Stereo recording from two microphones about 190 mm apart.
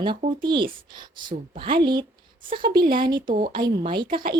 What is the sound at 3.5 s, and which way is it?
Speech, 25° right (ahead or behind).